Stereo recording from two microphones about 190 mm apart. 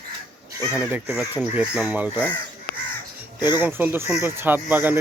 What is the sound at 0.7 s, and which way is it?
Speech, 10° right (ahead or behind).